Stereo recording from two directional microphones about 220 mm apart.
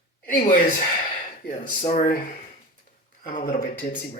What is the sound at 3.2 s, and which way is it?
Speech, 35° left (ahead or behind).